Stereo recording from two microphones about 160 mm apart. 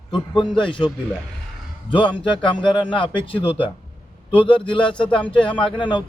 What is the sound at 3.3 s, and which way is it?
Speech, 35° left (ahead or behind).